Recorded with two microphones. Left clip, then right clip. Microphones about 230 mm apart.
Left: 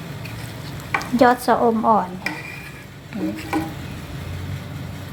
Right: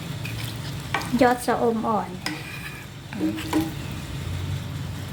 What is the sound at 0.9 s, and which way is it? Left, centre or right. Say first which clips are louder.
Stir: left 4 dB; centre.